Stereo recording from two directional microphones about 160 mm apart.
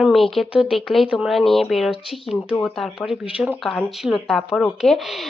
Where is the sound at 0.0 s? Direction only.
Centre (ahead or behind).